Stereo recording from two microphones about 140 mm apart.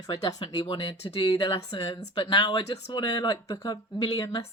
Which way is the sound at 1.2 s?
30° left (ahead or behind).